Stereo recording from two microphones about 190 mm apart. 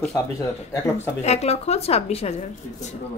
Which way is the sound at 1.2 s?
35° left (ahead or behind).